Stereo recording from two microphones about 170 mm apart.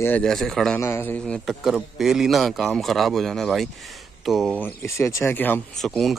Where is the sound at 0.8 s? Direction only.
15° left (ahead or behind).